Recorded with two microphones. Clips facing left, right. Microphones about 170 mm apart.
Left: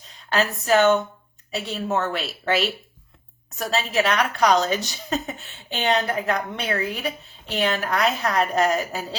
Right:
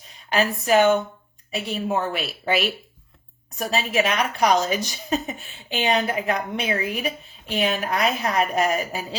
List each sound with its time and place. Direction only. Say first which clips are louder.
0.3 s speech: even; 15° right (ahead or behind)